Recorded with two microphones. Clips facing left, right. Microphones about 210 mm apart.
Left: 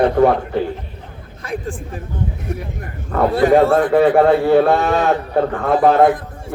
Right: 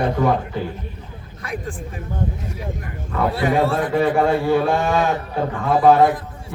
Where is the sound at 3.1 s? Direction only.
50° left (ahead or behind).